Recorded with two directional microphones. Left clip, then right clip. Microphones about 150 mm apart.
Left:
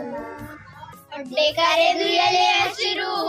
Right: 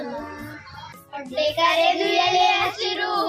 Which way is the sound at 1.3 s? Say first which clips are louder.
Left 1 dB; centre (ahead or behind).